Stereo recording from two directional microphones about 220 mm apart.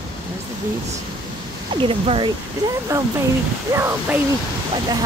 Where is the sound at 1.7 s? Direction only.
25° right (ahead or behind).